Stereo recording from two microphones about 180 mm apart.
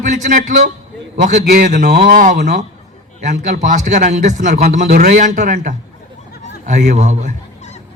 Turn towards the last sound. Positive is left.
turn(degrees=-40)  # may be behind; listen again after turning